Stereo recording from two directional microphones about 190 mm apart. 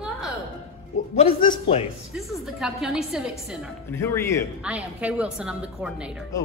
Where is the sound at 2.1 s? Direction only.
Centre (ahead or behind).